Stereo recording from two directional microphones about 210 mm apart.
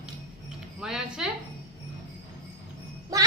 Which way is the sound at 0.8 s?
Centre (ahead or behind).